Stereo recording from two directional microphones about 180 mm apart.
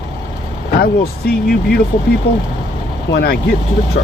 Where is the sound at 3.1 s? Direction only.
85° left.